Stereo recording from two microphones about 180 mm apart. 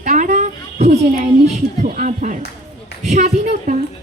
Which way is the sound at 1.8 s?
45° right (ahead or behind).